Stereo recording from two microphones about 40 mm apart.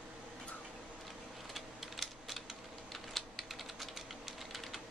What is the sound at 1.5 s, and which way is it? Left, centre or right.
Typing, centre.